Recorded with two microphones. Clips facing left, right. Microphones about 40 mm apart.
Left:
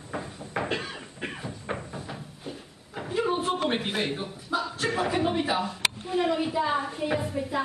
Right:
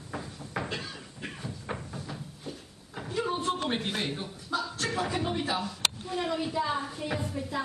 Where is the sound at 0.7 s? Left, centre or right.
Left.